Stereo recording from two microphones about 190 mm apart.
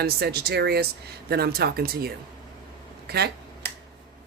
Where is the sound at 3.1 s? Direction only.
60° right (ahead or behind).